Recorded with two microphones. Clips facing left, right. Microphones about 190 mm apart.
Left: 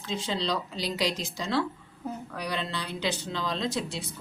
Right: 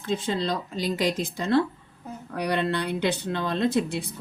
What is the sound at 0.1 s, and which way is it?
A woman's voice, 50° right (ahead or behind).